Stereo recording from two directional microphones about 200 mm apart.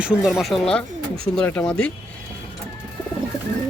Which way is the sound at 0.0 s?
5° right (ahead or behind).